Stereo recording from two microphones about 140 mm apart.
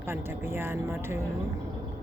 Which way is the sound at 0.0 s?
15° right (ahead or behind).